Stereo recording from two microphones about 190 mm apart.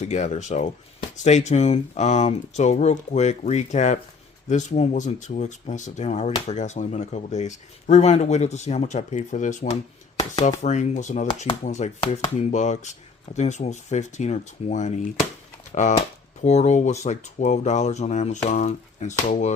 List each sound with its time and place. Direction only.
0.0 s speech: 35° left (ahead or behind)